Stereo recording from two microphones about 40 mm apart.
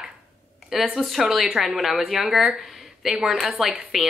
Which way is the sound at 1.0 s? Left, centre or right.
Centre.